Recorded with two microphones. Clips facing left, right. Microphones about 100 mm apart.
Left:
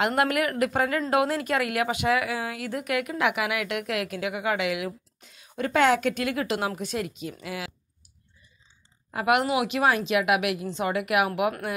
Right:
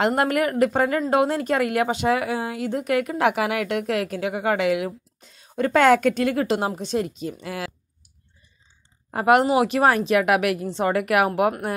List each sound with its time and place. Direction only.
0.0 s a woman's voice: 35° right (ahead or behind)
9.1 s a woman's voice: 40° right (ahead or behind)